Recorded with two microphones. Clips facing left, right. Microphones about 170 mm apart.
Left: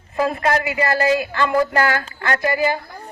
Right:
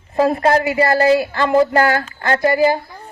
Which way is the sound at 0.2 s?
35° right (ahead or behind).